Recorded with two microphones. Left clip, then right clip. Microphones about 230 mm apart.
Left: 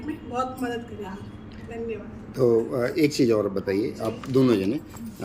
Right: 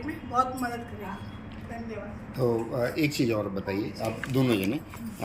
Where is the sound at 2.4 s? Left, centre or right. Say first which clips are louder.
Left 6 dB; centre.